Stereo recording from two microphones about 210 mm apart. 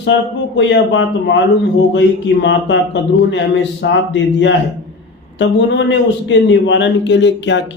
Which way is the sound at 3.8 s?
60° left (ahead or behind).